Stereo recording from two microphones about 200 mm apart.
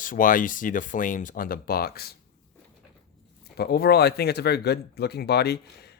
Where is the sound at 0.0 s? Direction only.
40° left (ahead or behind).